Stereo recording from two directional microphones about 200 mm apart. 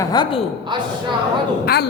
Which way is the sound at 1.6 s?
55° left (ahead or behind).